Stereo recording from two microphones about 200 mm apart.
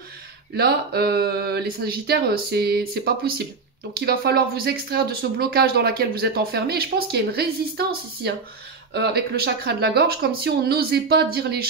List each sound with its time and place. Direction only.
0.6 s speech: 50° right (ahead or behind)